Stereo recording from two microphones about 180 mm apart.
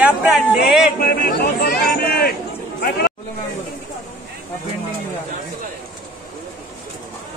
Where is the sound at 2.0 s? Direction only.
60° left (ahead or behind).